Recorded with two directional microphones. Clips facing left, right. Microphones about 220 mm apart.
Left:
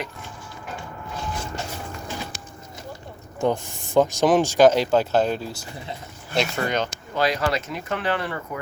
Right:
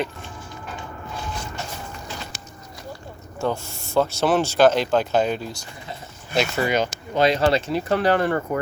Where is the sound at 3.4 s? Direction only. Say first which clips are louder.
Left 2 dB; 15° left (ahead or behind); by 6.9 s 10° right (ahead or behind).